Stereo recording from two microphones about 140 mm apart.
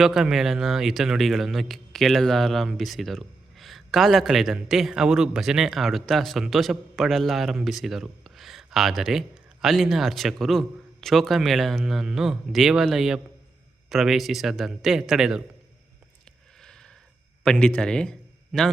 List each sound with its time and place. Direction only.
0.0 s speech: 5° right (ahead or behind)
16.6 s a sound: 5° left (ahead or behind)
17.4 s a man's voice: 5° left (ahead or behind)